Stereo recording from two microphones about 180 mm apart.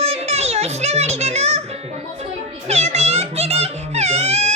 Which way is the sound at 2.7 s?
35° right (ahead or behind).